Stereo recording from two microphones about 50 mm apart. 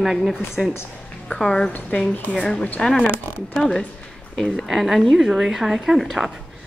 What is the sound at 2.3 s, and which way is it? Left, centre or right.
Speech, right.